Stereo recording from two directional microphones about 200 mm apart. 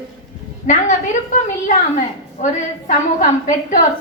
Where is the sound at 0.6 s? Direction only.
40° left (ahead or behind).